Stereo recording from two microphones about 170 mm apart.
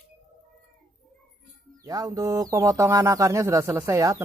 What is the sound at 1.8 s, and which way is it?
Speech, 20° right (ahead or behind).